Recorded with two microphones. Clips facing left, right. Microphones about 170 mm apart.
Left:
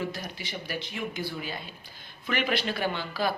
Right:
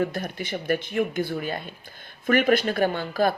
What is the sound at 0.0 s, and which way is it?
Speech, 55° right (ahead or behind).